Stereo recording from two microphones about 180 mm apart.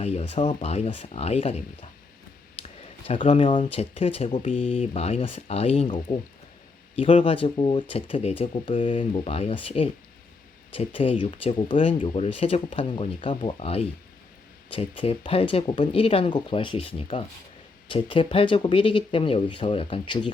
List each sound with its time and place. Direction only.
0.0 s speech: 35° left (ahead or behind)
3.1 s a man's voice: 30° left (ahead or behind)